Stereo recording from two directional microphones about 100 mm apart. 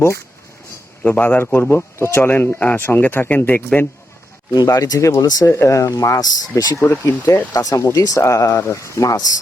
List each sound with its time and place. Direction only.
1.0 s speech: 15° left (ahead or behind)
1.7 s speech: 25° left (ahead or behind)
4.5 s speech: 40° left (ahead or behind)
6.7 s speech: 15° left (ahead or behind)
7.5 s speech: 35° left (ahead or behind)